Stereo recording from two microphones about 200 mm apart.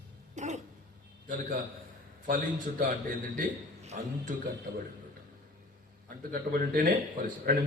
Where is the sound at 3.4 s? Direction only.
40° right (ahead or behind).